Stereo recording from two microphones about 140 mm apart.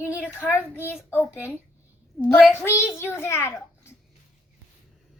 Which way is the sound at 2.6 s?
20° left (ahead or behind).